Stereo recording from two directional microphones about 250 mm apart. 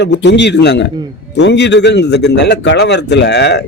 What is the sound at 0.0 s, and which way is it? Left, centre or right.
A man's voice, left.